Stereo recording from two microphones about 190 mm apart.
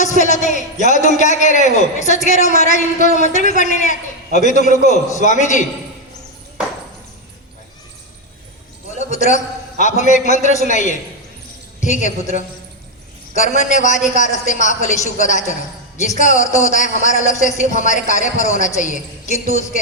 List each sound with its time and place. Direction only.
0.0 s a man's voice: 40° left (ahead or behind)
9.8 s a man's voice: 40° left (ahead or behind)